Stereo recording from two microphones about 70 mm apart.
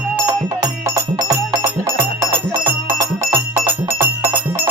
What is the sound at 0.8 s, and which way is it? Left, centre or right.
Music, right.